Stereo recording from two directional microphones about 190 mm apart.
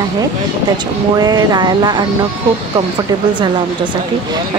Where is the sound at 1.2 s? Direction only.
20° right (ahead or behind).